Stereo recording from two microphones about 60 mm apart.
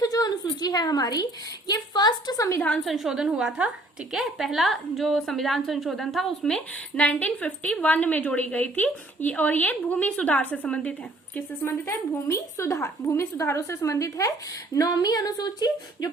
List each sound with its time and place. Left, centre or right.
0.0 s a woman's voice: left
2.8 s a woman's voice: centre; by 10.9 s left
11.6 s a woman's voice: left